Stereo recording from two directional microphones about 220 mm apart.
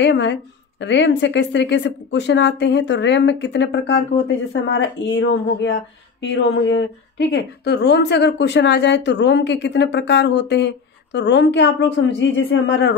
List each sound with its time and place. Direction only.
0.0 s a woman's voice: 55° left (ahead or behind)